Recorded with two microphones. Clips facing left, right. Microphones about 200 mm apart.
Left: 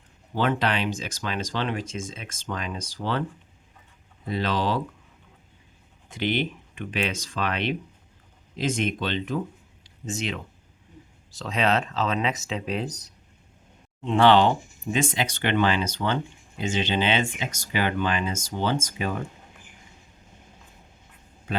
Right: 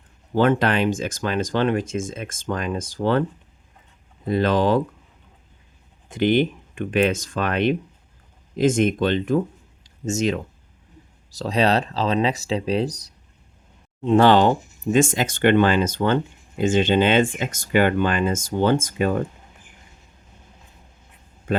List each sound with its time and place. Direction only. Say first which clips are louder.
0.3 s speech: right 6 dB; 50° right (ahead or behind)
4.3 s speech: right 7 dB; 50° right (ahead or behind)
6.1 s speech: right 8 dB; 50° right (ahead or behind)